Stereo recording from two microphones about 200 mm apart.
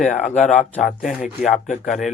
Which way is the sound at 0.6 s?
Centre (ahead or behind).